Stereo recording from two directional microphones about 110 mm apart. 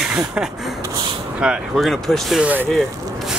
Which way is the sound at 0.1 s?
10° right (ahead or behind).